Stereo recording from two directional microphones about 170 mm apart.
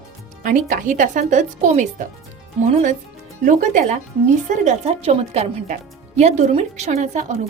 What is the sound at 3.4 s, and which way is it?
A woman's voice, 50° right (ahead or behind).